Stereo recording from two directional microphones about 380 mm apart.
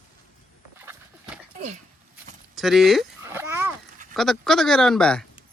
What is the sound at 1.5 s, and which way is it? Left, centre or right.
Dog, centre.